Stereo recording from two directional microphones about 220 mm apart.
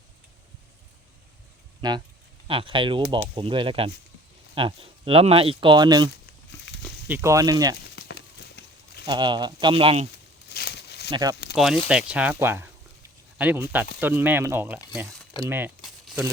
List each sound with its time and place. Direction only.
1.8 s speech: 20° right (ahead or behind)
7.1 s speech: 15° right (ahead or behind)
7.9 s horse: 50° left (ahead or behind)
9.0 s speech: 20° right (ahead or behind)
10.5 s a sound: 50° left (ahead or behind)
11.1 s speech: 15° right (ahead or behind)
11.5 s speech: centre (ahead or behind)
15.4 s crumpling: 10° right (ahead or behind)